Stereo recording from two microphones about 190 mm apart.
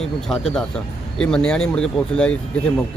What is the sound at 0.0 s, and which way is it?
A man's voice, centre (ahead or behind).